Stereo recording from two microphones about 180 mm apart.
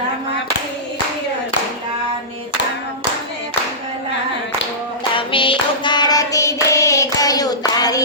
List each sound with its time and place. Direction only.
5.1 s hands: 30° left (ahead or behind)